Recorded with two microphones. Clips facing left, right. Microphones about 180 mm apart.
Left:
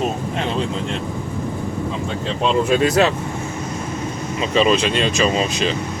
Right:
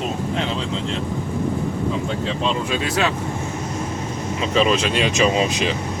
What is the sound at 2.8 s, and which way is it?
Speech, 40° left (ahead or behind).